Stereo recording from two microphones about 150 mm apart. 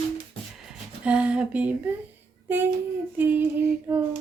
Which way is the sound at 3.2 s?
15° right (ahead or behind).